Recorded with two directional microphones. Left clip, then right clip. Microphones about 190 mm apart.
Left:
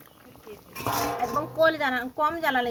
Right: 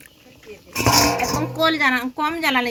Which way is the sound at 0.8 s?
60° right (ahead or behind).